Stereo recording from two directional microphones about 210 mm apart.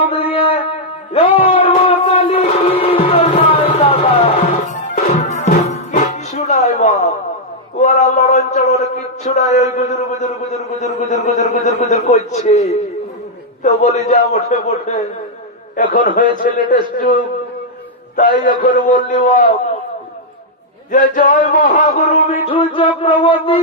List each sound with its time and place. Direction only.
0.3 s a sound: 25° left (ahead or behind)
1.8 s music: 25° left (ahead or behind)
7.8 s a sound: 35° left (ahead or behind)
9.7 s a man's voice: 35° left (ahead or behind)
20.9 s a man's voice: 40° left (ahead or behind); by 22.9 s 25° left (ahead or behind)
23.2 s music: 25° left (ahead or behind)